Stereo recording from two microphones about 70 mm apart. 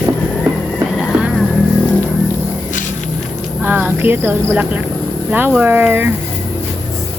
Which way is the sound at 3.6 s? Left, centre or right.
Right.